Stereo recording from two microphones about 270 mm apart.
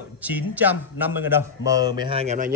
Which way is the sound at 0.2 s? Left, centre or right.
Centre.